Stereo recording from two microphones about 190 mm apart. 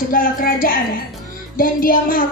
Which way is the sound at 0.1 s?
45° left (ahead or behind).